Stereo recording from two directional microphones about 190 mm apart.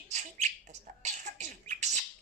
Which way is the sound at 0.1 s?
35° right (ahead or behind).